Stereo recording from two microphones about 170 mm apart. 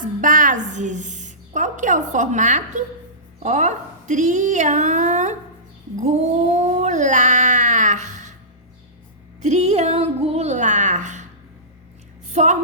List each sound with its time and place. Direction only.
0.0 s a woman's voice: 50° right (ahead or behind)
6.0 s cat: 40° right (ahead or behind)
9.4 s a sound: 40° right (ahead or behind)
12.3 s a woman's voice: 45° right (ahead or behind)